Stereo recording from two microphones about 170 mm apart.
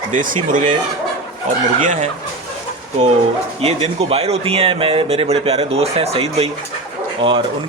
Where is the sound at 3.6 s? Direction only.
35° right (ahead or behind).